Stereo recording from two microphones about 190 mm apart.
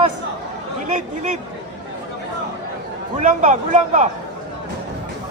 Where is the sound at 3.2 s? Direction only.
40° right (ahead or behind).